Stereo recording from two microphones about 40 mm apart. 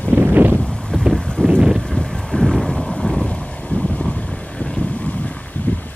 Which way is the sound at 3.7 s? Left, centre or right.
Left.